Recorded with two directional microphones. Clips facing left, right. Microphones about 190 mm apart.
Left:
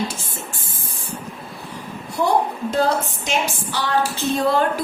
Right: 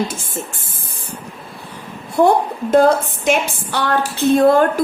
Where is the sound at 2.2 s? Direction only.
50° right (ahead or behind).